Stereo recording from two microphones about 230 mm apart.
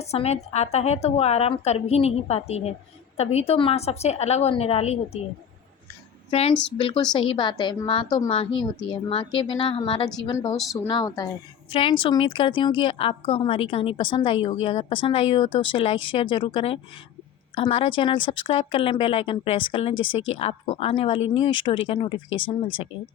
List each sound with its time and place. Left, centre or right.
0.0 s a woman's voice: left
6.3 s a woman's voice: left
22.3 s speech: left